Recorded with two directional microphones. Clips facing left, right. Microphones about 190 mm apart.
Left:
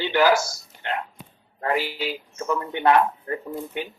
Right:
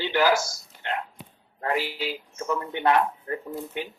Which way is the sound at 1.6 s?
80° left.